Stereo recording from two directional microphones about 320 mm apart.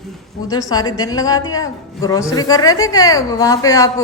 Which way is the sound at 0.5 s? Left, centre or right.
Centre.